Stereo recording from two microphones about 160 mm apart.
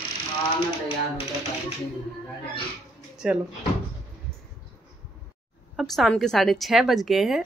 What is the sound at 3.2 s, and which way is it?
Speech, 5° right (ahead or behind).